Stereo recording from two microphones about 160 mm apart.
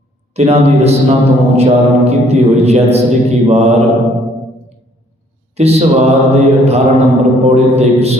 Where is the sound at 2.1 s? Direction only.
40° right (ahead or behind).